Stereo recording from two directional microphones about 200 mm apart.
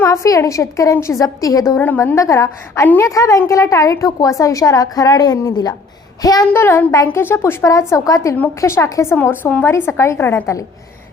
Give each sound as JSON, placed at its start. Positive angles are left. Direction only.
{"t": 0.0, "sound": "a woman's voice", "side_deg": 15}